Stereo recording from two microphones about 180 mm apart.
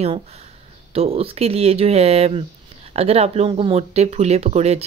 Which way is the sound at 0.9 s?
35° right (ahead or behind).